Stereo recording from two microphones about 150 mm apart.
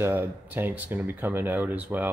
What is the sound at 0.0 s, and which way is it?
Speech, 15° right (ahead or behind).